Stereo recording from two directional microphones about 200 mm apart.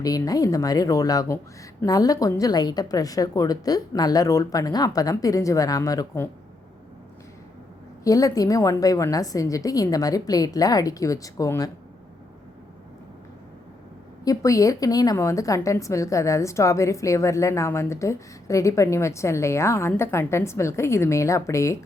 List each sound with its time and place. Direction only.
0.0 s a woman's voice: 20° left (ahead or behind)
8.0 s a woman's voice: 15° left (ahead or behind)
14.3 s a woman's voice: 15° left (ahead or behind)